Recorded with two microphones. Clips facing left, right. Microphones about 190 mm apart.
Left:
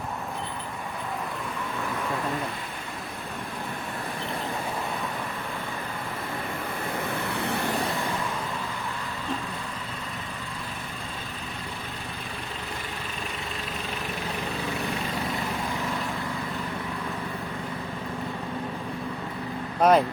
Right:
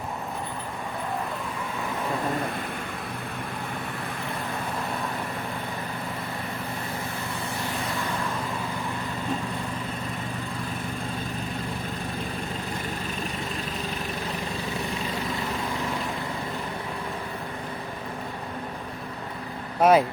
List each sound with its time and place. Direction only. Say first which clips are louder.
7.3 s vehicle: left 4 dB; 65° left (ahead or behind)
19.8 s speech: right 1 dB; 5° right (ahead or behind)